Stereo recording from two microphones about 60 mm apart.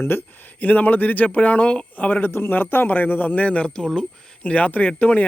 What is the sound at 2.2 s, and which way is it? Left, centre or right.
A man's voice, left.